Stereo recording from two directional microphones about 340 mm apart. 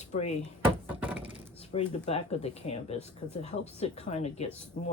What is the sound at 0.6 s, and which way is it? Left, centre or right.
Thunk, centre.